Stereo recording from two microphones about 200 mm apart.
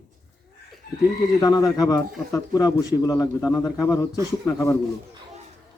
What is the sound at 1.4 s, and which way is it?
A man's voice, 20° left (ahead or behind).